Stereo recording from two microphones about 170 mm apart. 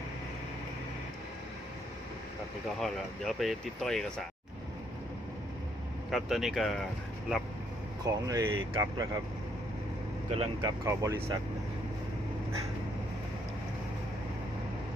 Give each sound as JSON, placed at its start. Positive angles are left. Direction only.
{"t": 2.8, "sound": "speech", "side_deg": 0}
{"t": 6.1, "sound": "speech", "side_deg": 0}
{"t": 8.0, "sound": "speech", "side_deg": -20}
{"t": 10.2, "sound": "speech", "side_deg": -35}
{"t": 10.6, "sound": "speech", "side_deg": -20}